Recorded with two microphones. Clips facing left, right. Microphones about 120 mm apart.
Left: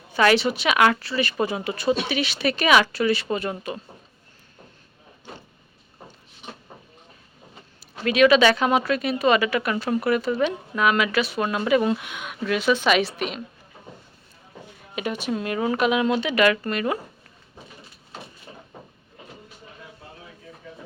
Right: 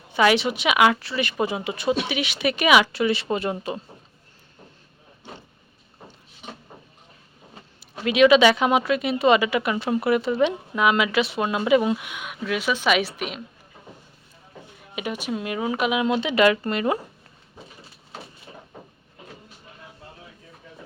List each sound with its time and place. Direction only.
0.1 s speech: 15° right (ahead or behind)
8.0 s speech: 15° right (ahead or behind)
14.9 s speech: 10° right (ahead or behind); by 17.0 s 25° right (ahead or behind)